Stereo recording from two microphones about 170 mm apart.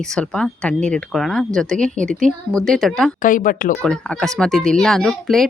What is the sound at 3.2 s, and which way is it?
Speech, 50° left (ahead or behind).